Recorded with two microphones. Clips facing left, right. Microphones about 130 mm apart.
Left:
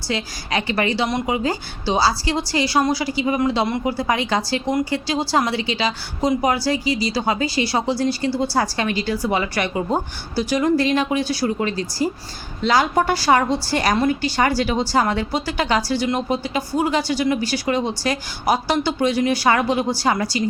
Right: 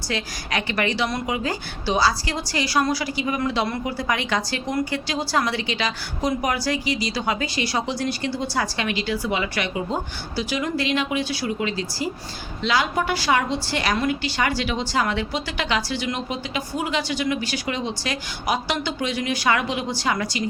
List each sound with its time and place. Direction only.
0.1 s a woman's voice: 30° left (ahead or behind)